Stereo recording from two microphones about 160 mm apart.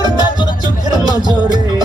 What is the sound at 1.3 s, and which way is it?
Music, 25° right (ahead or behind).